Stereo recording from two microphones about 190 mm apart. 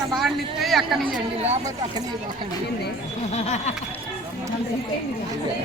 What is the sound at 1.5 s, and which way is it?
Speech, 20° right (ahead or behind).